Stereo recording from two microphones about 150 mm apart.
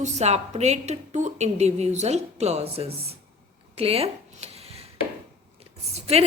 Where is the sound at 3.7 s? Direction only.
40° right (ahead or behind).